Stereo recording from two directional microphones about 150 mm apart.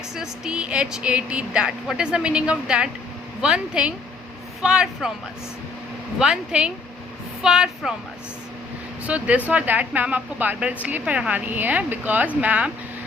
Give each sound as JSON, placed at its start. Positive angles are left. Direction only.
{"t": 0.1, "sound": "a woman's voice", "side_deg": -5}
{"t": 6.1, "sound": "a woman's voice", "side_deg": -5}
{"t": 9.0, "sound": "a woman's voice", "side_deg": -10}